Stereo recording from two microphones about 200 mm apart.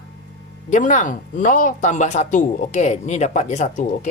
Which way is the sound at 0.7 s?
40° left (ahead or behind).